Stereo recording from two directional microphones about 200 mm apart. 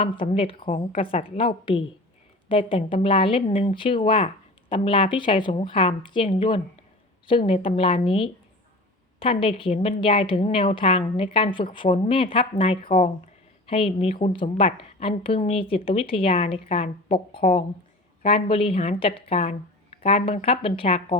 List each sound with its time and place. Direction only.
0.2 s a woman's voice: 25° left (ahead or behind)